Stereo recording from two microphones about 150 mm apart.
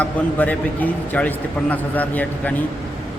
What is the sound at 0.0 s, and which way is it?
Speech, 10° left (ahead or behind).